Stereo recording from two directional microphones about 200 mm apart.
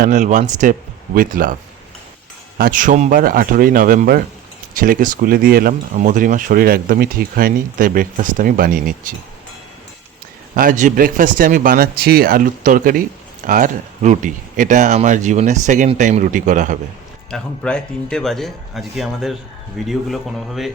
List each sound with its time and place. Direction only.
0.0 s speech: 40° right (ahead or behind)
2.6 s speech: 45° right (ahead or behind)
10.5 s speech: 40° right (ahead or behind)
17.3 s speech: 5° left (ahead or behind)